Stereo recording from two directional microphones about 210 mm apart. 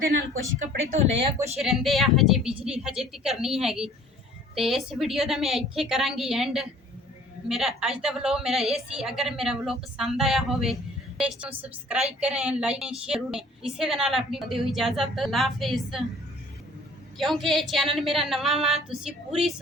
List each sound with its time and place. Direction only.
0.9 s speech: 35° right (ahead or behind)
1.6 s a woman's voice: centre (ahead or behind)
17.2 s a woman's voice: centre (ahead or behind)